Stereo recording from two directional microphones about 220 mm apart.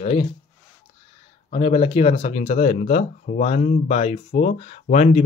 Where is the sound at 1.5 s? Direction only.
25° left (ahead or behind).